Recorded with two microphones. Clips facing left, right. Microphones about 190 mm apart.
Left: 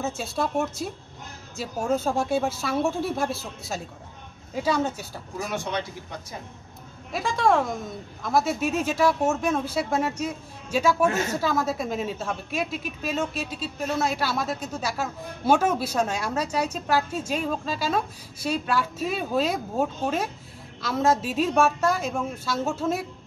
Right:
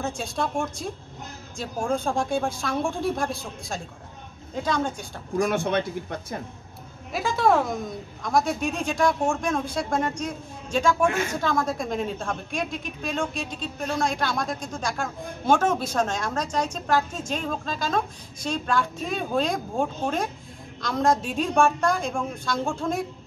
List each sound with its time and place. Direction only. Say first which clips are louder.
0.0 s a woman's voice: left 1 dB; 5° left (ahead or behind)
5.4 s a man's voice: right 6 dB; 55° right (ahead or behind)
7.1 s a woman's voice: right 1 dB; centre (ahead or behind)